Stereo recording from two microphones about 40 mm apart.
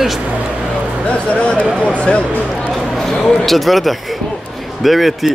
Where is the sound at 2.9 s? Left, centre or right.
Centre.